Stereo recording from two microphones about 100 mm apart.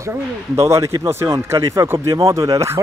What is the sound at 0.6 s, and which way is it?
Speech, 30° right (ahead or behind).